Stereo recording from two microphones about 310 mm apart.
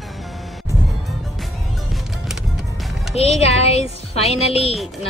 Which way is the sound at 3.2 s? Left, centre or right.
Centre.